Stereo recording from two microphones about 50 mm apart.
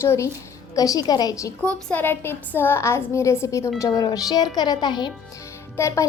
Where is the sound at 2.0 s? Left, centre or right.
Left.